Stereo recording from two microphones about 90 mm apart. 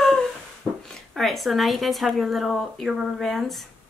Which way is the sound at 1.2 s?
Centre (ahead or behind).